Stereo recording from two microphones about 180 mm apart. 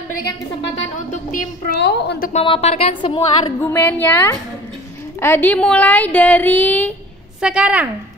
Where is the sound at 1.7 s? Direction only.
70° left (ahead or behind).